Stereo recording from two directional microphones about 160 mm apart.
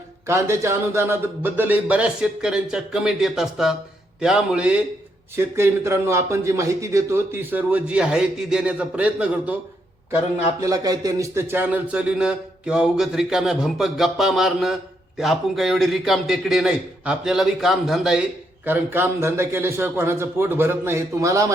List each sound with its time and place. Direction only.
0.3 s a man's voice: 15° right (ahead or behind)
10.6 s a man's voice: 20° right (ahead or behind); by 18.2 s centre (ahead or behind)
18.6 s a man's voice: 15° right (ahead or behind)